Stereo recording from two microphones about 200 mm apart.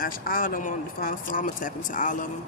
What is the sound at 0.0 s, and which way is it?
Speech, 45° left (ahead or behind).